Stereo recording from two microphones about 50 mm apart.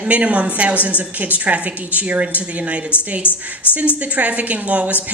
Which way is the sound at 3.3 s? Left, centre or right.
Left.